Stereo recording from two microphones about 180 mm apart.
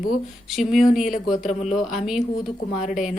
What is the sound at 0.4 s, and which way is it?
Speech, centre (ahead or behind).